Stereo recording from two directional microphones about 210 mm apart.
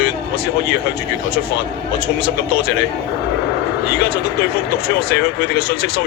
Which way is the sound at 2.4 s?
50° left (ahead or behind).